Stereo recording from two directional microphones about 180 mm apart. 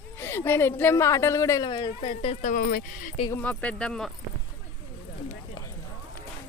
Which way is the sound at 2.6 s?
55° left (ahead or behind).